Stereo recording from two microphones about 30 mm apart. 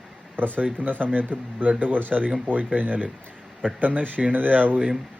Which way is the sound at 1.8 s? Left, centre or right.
Right.